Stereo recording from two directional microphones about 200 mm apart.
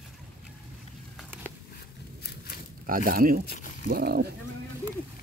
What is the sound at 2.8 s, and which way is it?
Speech, 45° right (ahead or behind).